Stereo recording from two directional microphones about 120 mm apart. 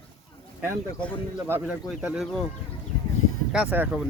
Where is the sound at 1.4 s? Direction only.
15° right (ahead or behind).